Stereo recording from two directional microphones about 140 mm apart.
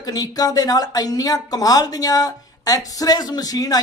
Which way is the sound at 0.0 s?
30° left (ahead or behind).